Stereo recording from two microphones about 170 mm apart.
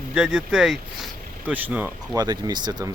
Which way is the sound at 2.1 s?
25° right (ahead or behind).